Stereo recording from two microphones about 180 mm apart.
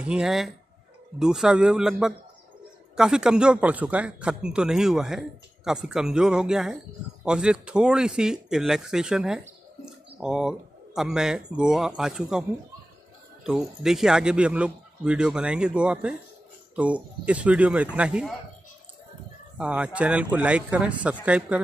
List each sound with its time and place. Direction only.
0.0 s speech: 5° right (ahead or behind)
9.4 s a sound: 5° right (ahead or behind)
11.0 s speech: centre (ahead or behind)
13.5 s a man's voice: 5° right (ahead or behind)
19.6 s a man's voice: 5° right (ahead or behind)